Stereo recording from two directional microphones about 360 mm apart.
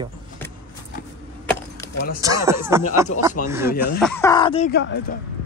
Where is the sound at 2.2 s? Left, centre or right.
Centre.